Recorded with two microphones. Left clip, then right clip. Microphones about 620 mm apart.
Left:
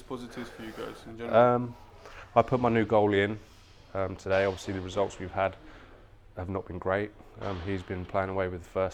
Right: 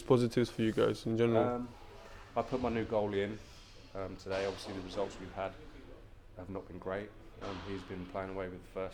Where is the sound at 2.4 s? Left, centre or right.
Left.